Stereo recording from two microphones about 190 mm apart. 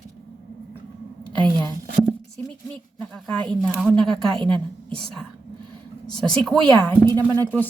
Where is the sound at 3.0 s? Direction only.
5° left (ahead or behind).